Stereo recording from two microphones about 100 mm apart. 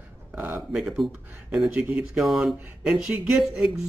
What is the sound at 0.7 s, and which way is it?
Speech, 5° right (ahead or behind).